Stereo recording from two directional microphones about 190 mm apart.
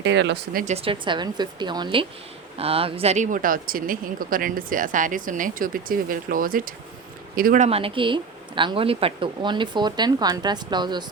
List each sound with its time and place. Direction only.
0.0 s speech: 65° right (ahead or behind)
0.6 s speech: 35° right (ahead or behind)